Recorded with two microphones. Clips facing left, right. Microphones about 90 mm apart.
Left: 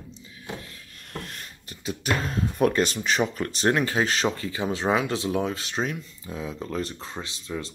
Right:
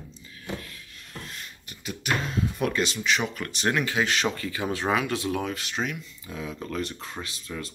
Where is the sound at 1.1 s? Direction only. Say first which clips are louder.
Left 3 dB; 45° left (ahead or behind).